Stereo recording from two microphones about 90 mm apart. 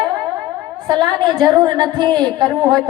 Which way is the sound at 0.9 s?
55° right (ahead or behind).